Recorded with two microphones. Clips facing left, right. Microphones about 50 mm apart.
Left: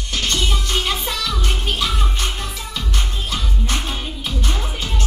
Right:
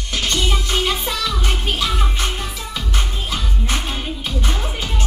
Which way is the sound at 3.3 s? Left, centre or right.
Centre.